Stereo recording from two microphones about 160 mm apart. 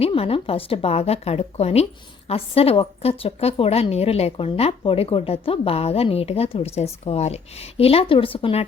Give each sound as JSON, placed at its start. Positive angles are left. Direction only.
{"t": 0.0, "sound": "a woman's voice", "side_deg": 35}